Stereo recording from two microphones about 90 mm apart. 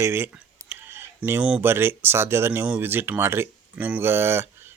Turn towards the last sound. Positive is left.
turn(degrees=-25)  # may be behind; listen again after turning